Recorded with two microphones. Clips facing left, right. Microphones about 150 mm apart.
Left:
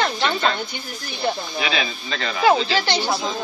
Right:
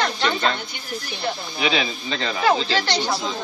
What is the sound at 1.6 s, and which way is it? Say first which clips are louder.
Speech: right 4 dB; 25° right (ahead or behind).